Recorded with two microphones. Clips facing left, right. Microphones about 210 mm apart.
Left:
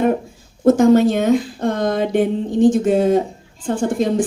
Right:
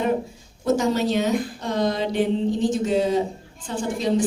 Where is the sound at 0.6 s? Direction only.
50° left (ahead or behind).